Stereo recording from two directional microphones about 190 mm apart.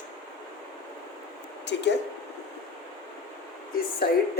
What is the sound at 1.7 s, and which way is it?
Speech, 65° left (ahead or behind).